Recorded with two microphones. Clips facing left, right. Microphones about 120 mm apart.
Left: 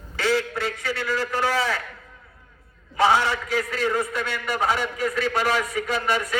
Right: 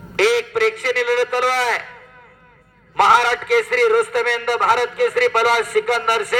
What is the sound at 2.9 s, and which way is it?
A man's voice, 80° right.